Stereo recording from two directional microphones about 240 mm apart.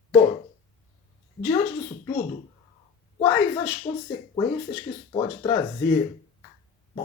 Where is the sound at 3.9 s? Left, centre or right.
Centre.